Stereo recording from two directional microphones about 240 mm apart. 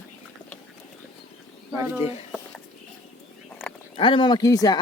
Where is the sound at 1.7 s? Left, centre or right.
Centre.